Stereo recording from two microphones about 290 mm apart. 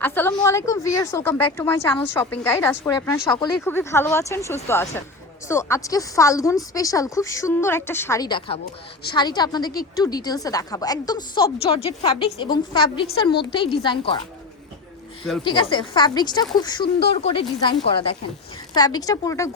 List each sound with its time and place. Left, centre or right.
0.0 s a woman's voice: centre
15.4 s a woman's voice: centre